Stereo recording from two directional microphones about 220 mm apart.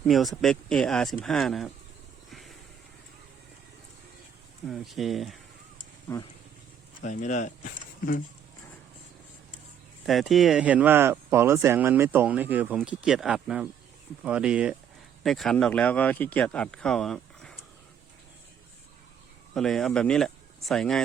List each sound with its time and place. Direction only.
0.0 s speech: centre (ahead or behind)
2.3 s vehicle: centre (ahead or behind)
4.7 s speech: centre (ahead or behind)
6.1 s speech: 10° left (ahead or behind)
7.0 s speech: 35° left (ahead or behind)
10.1 s speech: centre (ahead or behind)
19.5 s speech: centre (ahead or behind)